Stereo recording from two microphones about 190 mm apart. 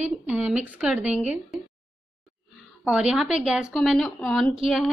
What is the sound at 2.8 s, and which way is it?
A woman's voice, 5° right (ahead or behind).